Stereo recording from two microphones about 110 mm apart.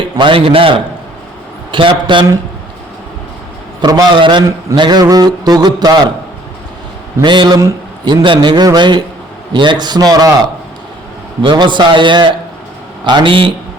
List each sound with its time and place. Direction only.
0.0 s a man's voice: 50° right (ahead or behind)
1.7 s a man's voice: 50° right (ahead or behind)
3.8 s a man's voice: 35° right (ahead or behind)
7.2 s a man's voice: 40° right (ahead or behind)
11.4 s a man's voice: 45° right (ahead or behind)